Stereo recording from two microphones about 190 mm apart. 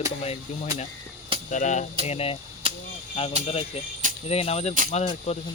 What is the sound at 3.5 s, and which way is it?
Speech, 30° left (ahead or behind).